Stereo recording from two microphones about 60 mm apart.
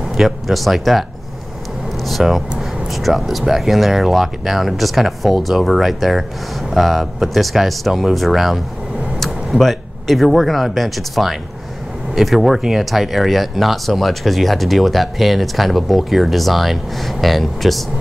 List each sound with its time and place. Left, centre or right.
0.1 s speech: centre
2.0 s speech: centre